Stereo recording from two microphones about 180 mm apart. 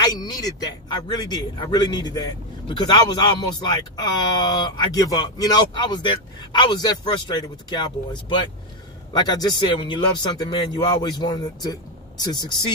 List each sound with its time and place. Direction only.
0.0 s a man's voice: 20° left (ahead or behind)